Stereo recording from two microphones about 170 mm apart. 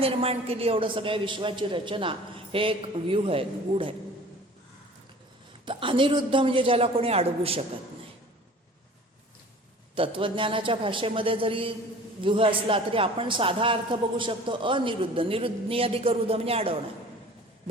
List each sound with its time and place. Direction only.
0.0 s a man's voice: 35° right (ahead or behind)
5.6 s a man's voice: 30° right (ahead or behind)
9.9 s a man's voice: 30° right (ahead or behind)